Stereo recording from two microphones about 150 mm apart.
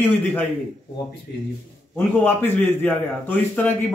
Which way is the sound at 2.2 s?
10° left (ahead or behind).